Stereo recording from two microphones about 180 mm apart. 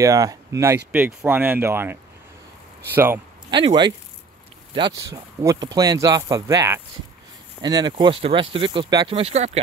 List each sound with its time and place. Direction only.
0.0 s speech: 20° right (ahead or behind)
3.4 s speech: 25° right (ahead or behind)